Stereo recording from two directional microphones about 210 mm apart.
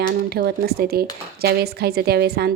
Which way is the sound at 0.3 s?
45° right (ahead or behind).